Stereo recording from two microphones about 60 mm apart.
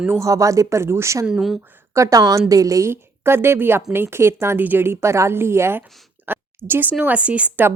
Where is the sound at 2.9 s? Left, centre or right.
Right.